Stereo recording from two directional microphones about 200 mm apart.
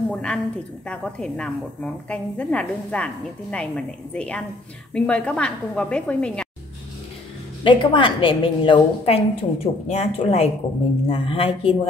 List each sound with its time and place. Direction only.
0.1 s a woman's voice: 5° left (ahead or behind)
7.6 s a woman's voice: 25° left (ahead or behind)